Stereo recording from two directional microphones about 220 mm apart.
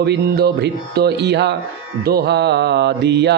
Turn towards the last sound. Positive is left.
turn(degrees=-50)  # may be behind; listen again after turning